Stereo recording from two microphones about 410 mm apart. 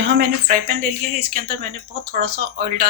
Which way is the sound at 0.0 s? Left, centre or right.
Right.